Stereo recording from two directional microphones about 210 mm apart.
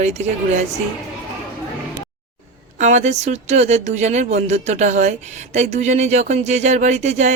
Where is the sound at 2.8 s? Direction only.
35° right (ahead or behind).